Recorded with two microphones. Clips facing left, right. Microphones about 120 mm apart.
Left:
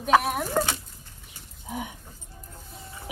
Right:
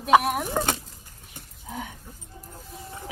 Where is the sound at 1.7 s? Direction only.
15° left (ahead or behind).